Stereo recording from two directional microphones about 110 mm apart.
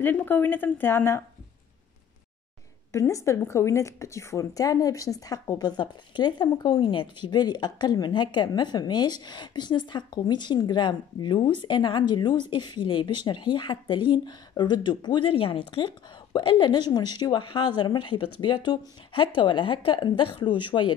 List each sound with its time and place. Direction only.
0.0 s speech: 15° left (ahead or behind)
2.9 s a woman's voice: 30° left (ahead or behind); by 20.9 s 45° left (ahead or behind)